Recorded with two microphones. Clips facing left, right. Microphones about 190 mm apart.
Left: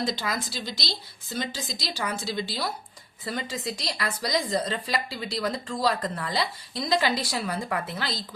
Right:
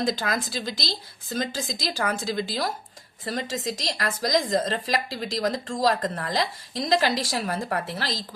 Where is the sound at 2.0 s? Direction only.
50° right (ahead or behind).